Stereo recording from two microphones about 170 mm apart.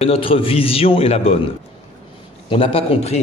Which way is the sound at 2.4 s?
30° left (ahead or behind).